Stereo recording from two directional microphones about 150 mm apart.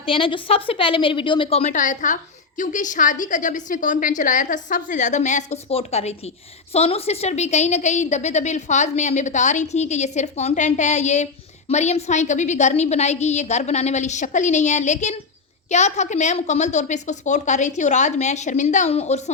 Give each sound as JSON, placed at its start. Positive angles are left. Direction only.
{"t": 0.0, "sound": "a woman's voice", "side_deg": 35}